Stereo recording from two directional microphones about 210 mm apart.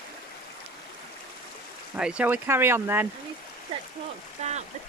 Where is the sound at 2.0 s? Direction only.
5° right (ahead or behind).